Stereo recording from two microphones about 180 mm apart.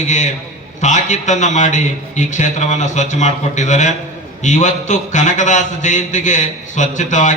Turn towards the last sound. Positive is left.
turn(degrees=45)  # may be behind; listen again after turning